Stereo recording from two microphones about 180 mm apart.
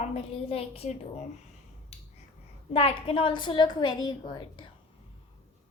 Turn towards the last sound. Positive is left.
turn(degrees=25)  # may be behind; listen again after turning